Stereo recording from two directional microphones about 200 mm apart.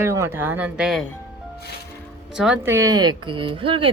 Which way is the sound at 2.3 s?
5° right (ahead or behind).